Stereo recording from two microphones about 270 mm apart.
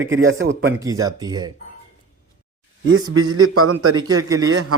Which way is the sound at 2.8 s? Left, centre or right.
Right.